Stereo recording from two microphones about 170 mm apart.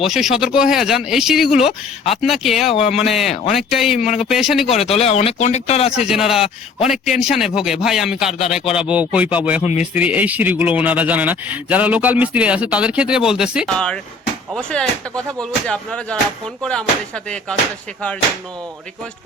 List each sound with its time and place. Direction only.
0.0 s speech: centre (ahead or behind)
4.7 s speech: 35° left (ahead or behind)
6.1 s speech: centre (ahead or behind)
6.4 s speech: 35° left (ahead or behind)
6.9 s speech: centre (ahead or behind)
9.6 s speech: 40° left (ahead or behind)
9.9 s speech: 10° right (ahead or behind)
13.7 s speech: 5° left (ahead or behind)